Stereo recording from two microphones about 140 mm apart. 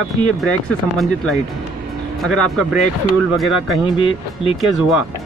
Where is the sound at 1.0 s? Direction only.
Centre (ahead or behind).